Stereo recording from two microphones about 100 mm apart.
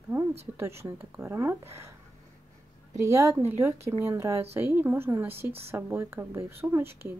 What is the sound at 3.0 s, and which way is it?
Speech, 30° right (ahead or behind).